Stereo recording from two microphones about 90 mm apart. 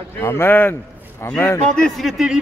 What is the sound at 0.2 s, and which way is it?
A man's voice, 25° left (ahead or behind).